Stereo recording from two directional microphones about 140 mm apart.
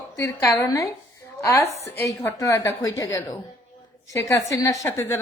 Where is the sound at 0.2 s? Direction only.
20° left (ahead or behind).